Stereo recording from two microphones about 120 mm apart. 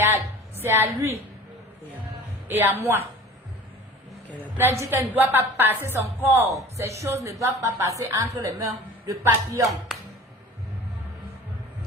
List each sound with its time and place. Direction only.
0.0 s a sound: 20° right (ahead or behind)
2.5 s a woman's voice: 15° right (ahead or behind)
4.8 s a woman's voice: 15° right (ahead or behind)